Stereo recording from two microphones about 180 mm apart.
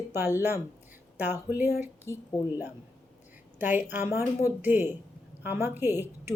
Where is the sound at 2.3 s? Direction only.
20° left (ahead or behind).